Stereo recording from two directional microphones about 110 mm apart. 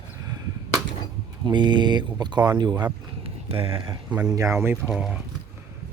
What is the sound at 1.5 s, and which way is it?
Speech, 45° right (ahead or behind).